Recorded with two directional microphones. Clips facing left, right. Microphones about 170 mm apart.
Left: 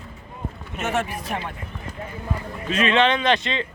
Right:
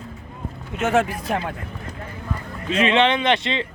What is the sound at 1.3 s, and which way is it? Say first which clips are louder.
Speech: right 6 dB; 90° right.